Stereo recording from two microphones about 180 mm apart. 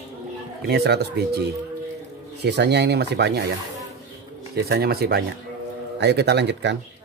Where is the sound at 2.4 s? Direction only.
70° right (ahead or behind).